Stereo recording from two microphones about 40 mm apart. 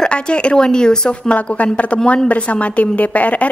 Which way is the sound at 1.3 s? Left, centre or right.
Left.